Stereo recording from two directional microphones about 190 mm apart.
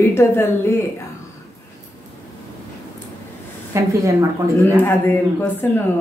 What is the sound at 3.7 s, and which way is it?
Speech, 15° right (ahead or behind).